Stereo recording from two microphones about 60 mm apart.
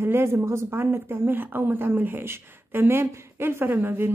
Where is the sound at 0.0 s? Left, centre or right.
Right.